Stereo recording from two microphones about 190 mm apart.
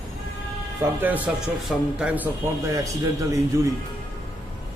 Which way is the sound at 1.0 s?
10° right (ahead or behind).